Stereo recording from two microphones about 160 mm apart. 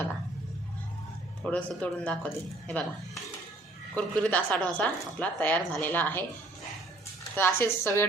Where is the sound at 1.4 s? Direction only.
5° left (ahead or behind).